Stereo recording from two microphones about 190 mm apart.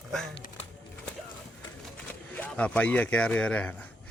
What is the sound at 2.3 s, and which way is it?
Speech, 5° left (ahead or behind).